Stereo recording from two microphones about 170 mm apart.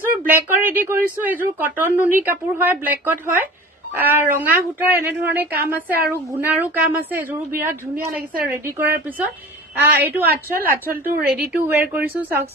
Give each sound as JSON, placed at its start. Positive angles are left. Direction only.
{"t": 0.2, "sound": "a woman's voice", "side_deg": -10}
{"t": 10.7, "sound": "a woman's voice", "side_deg": -60}
{"t": 11.6, "sound": "a woman's voice", "side_deg": -15}